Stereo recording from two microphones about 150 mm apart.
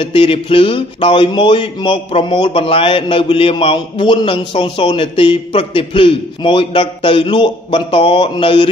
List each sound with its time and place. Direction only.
0.0 s speech: 35° left (ahead or behind)